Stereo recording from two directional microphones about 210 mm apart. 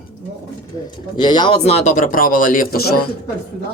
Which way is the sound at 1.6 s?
35° left (ahead or behind).